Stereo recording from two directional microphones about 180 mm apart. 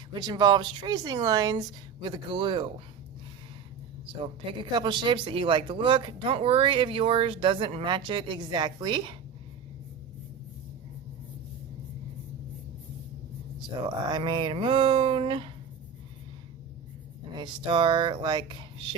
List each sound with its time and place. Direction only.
0.1 s speech: 20° right (ahead or behind)
4.7 s speech: 25° right (ahead or behind)
13.8 s speech: 25° right (ahead or behind)
17.3 s speech: 25° right (ahead or behind)